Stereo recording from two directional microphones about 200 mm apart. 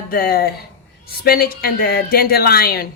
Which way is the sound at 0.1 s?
45° left (ahead or behind).